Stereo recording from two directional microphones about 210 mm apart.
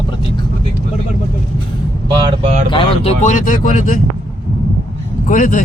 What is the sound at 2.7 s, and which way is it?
Speech, 30° left (ahead or behind).